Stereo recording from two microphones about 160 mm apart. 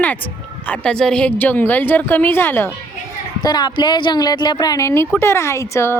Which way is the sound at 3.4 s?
25° left (ahead or behind).